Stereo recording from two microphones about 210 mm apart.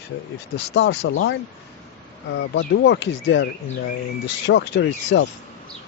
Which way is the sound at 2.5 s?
60° left (ahead or behind).